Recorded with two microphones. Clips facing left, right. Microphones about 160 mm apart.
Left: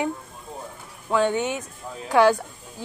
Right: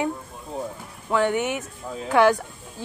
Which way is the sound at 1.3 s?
15° right (ahead or behind).